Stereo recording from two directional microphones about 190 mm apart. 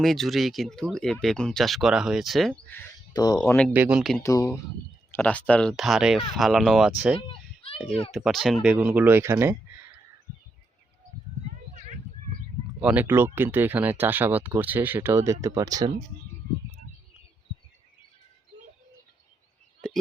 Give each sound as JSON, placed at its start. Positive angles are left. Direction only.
{"t": 0.0, "sound": "speech", "side_deg": 0}
{"t": 3.1, "sound": "speech", "side_deg": 20}
{"t": 3.3, "sound": "speech", "side_deg": 5}
{"t": 3.7, "sound": "speech", "side_deg": -10}
{"t": 4.2, "sound": "speech", "side_deg": 15}
{"t": 7.2, "sound": "a sound", "side_deg": 30}
{"t": 8.1, "sound": "speech", "side_deg": 0}
{"t": 12.8, "sound": "speech", "side_deg": -5}
{"t": 19.8, "sound": "a sound", "side_deg": 5}